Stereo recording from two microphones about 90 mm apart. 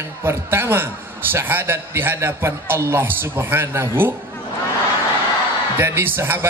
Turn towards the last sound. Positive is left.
turn(degrees=-25)  # may be behind; listen again after turning